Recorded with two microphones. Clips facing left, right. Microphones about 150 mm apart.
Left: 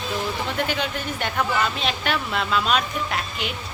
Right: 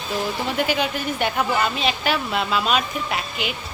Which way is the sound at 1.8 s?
5° right (ahead or behind).